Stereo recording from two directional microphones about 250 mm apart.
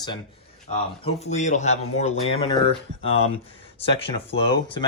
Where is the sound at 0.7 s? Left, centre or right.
Left.